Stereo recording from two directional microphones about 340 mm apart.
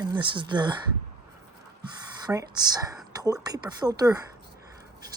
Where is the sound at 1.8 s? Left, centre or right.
Centre.